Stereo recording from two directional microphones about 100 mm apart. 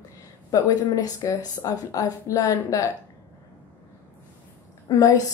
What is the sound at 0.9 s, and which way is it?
A woman's voice, 35° left (ahead or behind).